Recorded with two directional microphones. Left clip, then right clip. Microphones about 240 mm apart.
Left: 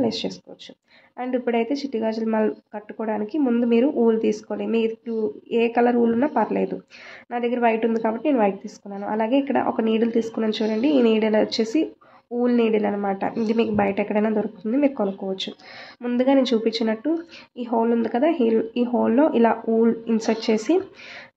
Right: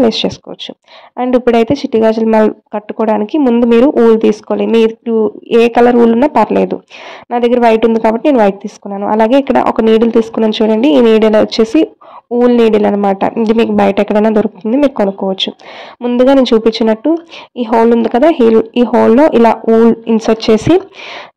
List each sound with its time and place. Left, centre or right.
0.0 s speech: right